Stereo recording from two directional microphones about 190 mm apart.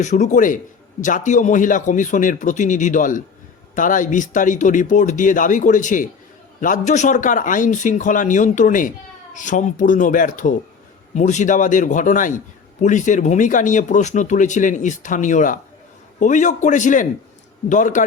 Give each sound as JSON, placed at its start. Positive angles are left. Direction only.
{"t": 0.0, "sound": "speech", "side_deg": 40}